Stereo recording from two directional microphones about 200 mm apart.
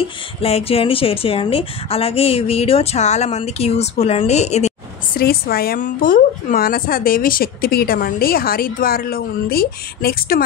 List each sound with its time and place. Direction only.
0.0 s speech: 30° left (ahead or behind)
5.1 s a woman's voice: 50° left (ahead or behind)